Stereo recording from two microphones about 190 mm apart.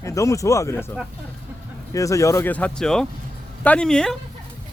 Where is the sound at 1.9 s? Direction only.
15° left (ahead or behind).